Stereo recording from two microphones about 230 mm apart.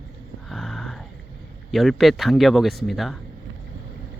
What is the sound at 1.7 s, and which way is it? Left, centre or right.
Speech, centre.